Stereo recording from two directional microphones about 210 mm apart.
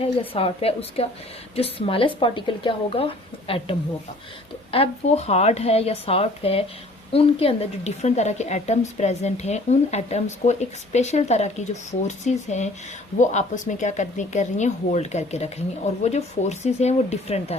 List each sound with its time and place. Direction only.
0.0 s a woman's voice: 25° left (ahead or behind)